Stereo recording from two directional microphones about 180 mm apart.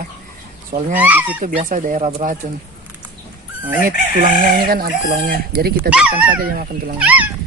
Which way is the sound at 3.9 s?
50° right (ahead or behind).